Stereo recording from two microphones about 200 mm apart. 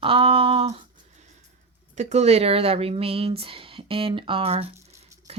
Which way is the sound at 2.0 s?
35° right (ahead or behind).